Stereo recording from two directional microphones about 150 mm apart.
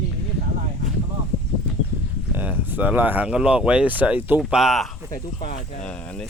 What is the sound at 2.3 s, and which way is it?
Speech, 10° right (ahead or behind).